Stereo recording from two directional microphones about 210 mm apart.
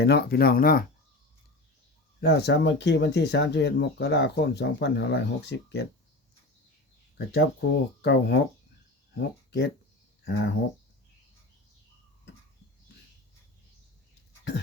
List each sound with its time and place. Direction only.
0.0 s speech: 50° left (ahead or behind)
2.2 s speech: 55° left (ahead or behind)
7.3 s speech: 55° left (ahead or behind)